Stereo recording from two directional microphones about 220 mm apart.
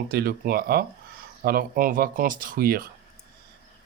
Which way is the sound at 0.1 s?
45° right (ahead or behind).